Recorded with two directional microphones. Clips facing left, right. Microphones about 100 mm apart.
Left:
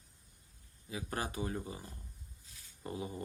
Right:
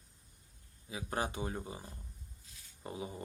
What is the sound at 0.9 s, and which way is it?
Speech, 20° right (ahead or behind).